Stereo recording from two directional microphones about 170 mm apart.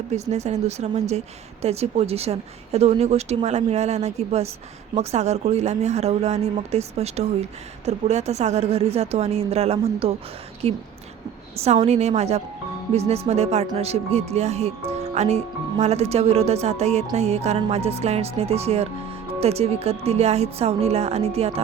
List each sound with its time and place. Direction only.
0.1 s speech: 40° right (ahead or behind)